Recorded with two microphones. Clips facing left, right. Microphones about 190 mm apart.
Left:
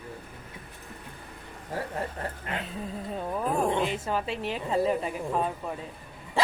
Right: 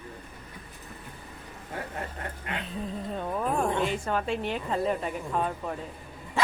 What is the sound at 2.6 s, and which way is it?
A woman's voice, 5° left (ahead or behind).